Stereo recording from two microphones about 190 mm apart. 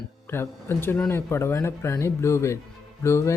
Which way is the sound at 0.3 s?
10° left (ahead or behind).